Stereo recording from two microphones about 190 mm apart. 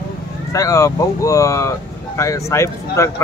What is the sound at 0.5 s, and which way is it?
Speech, 15° left (ahead or behind).